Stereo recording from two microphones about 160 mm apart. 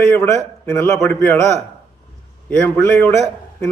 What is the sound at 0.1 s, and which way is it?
A man's voice, 15° left (ahead or behind).